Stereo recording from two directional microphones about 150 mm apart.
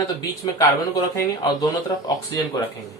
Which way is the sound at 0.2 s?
25° left (ahead or behind).